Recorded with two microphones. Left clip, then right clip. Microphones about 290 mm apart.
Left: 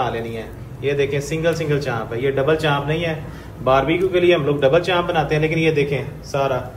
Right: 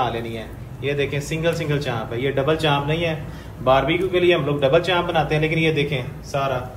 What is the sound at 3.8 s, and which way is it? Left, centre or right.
A man's voice, centre.